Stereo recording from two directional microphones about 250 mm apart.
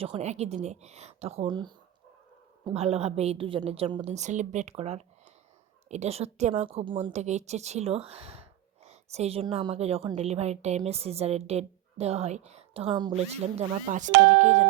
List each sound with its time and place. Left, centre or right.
0.0 s speech: right